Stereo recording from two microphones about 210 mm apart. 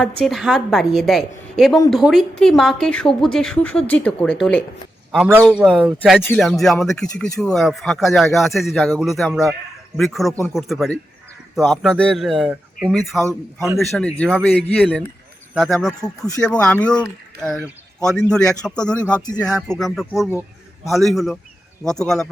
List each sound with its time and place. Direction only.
0.0 s a woman's voice: centre (ahead or behind)
13.2 s a man's voice: 15° right (ahead or behind)
13.7 s a woman's voice: centre (ahead or behind)
16.0 s speech: 15° left (ahead or behind)
16.4 s a woman's voice: 5° left (ahead or behind)
18.0 s a woman's voice: 5° left (ahead or behind)